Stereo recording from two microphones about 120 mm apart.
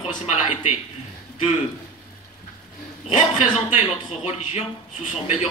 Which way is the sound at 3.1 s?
70° left (ahead or behind).